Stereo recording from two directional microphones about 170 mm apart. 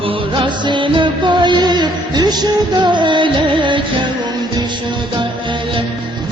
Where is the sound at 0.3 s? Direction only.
25° right (ahead or behind).